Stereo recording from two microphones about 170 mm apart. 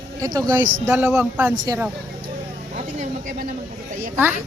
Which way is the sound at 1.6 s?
20° right (ahead or behind).